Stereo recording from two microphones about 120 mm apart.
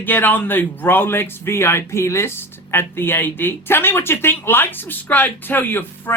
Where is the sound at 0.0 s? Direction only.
15° left (ahead or behind).